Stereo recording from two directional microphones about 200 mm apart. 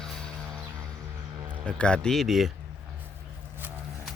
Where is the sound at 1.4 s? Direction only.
25° right (ahead or behind).